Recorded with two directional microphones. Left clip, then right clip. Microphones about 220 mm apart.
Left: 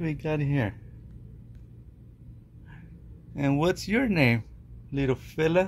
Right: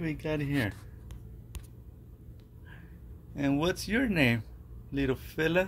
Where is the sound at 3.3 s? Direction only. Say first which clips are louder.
Left 4 dB; 10° left (ahead or behind).